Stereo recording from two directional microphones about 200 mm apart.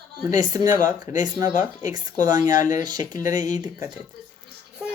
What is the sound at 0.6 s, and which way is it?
Speech, 40° left (ahead or behind).